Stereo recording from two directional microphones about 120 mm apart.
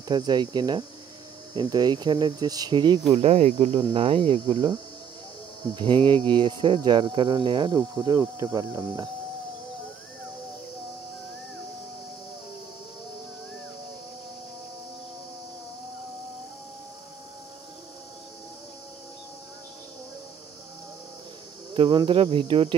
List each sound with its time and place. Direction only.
0.1 s speech: 35° right (ahead or behind)
3.1 s speech: 55° right (ahead or behind)
5.8 s speech: 45° right (ahead or behind)
21.7 s speech: 45° right (ahead or behind)